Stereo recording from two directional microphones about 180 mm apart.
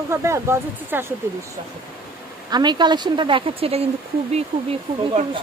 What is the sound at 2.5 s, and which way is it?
Speech, 25° right (ahead or behind).